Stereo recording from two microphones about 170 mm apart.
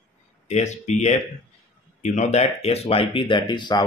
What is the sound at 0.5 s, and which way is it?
Speech, 40° left (ahead or behind).